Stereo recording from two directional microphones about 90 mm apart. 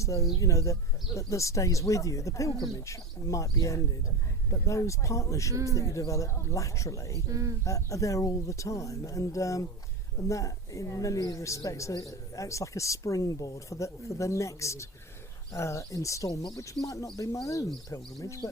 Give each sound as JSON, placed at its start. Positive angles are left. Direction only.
{"t": 0.0, "sound": "speech", "side_deg": 35}
{"t": 5.5, "sound": "speech", "side_deg": -35}
{"t": 5.8, "sound": "speech", "side_deg": 35}
{"t": 7.3, "sound": "speech", "side_deg": -40}
{"t": 7.6, "sound": "speech", "side_deg": 35}